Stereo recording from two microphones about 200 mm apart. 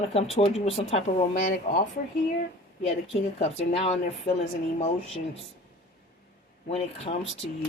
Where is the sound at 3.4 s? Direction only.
30° left (ahead or behind).